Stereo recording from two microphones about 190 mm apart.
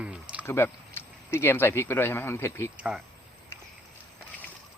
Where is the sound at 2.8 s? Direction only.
5° right (ahead or behind).